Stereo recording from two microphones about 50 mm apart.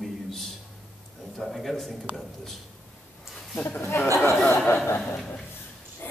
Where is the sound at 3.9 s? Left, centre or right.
Left.